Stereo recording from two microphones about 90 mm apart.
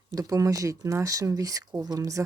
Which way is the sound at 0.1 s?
40° right (ahead or behind).